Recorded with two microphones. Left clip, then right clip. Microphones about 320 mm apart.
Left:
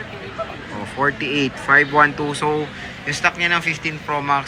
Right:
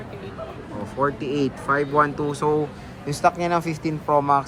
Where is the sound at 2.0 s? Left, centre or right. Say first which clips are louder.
Left 5 dB; centre.